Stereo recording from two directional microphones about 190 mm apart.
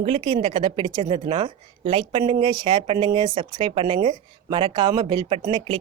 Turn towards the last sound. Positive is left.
turn(degrees=-25)  # may be behind; listen again after turning